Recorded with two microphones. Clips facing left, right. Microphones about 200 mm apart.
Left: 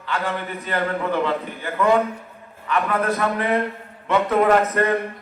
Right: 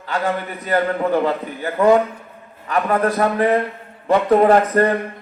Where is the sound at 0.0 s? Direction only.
40° right (ahead or behind).